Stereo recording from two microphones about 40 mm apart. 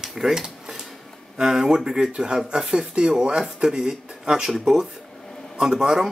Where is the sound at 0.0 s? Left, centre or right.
Centre.